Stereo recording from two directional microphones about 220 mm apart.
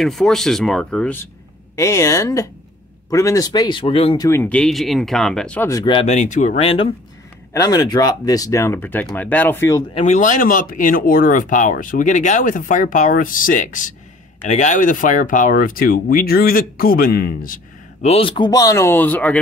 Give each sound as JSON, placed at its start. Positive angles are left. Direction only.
{"t": 0.0, "sound": "speech", "side_deg": 0}
{"t": 4.3, "sound": "speech", "side_deg": 10}
{"t": 9.9, "sound": "speech", "side_deg": 30}
{"t": 18.0, "sound": "speech", "side_deg": 25}